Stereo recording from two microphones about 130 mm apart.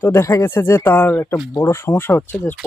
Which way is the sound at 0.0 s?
20° left (ahead or behind).